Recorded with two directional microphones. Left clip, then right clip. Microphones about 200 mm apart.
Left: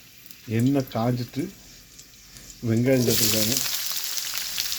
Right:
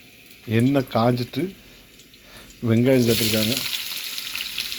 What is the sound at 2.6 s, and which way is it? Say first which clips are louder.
Speech: right 4 dB; 15° right (ahead or behind).